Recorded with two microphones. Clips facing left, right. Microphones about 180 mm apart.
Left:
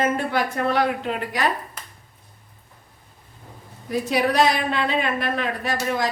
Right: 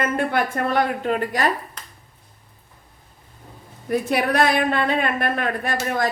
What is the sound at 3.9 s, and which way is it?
A woman's voice, 55° right (ahead or behind).